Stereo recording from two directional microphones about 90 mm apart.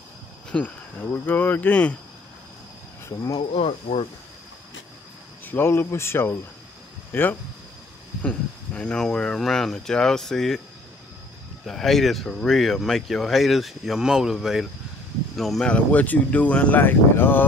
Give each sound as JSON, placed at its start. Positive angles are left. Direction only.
{"t": 0.5, "sound": "speech", "side_deg": 15}
{"t": 3.1, "sound": "speech", "side_deg": 35}
{"t": 3.3, "sound": "speech", "side_deg": 90}
{"t": 5.4, "sound": "speech", "side_deg": 25}
{"t": 11.6, "sound": "speech", "side_deg": 5}
{"t": 15.7, "sound": "speech", "side_deg": 15}